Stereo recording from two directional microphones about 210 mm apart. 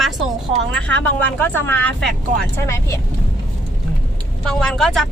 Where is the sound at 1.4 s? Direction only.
10° left (ahead or behind).